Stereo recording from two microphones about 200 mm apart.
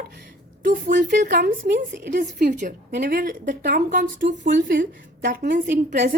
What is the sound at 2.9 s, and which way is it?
Speech, 50° right (ahead or behind).